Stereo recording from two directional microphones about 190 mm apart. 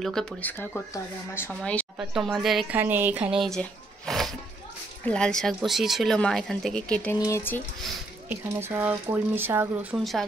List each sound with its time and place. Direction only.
0.0 s speech: 5° left (ahead or behind)
8.3 s speech: 10° right (ahead or behind)
9.9 s speech: centre (ahead or behind)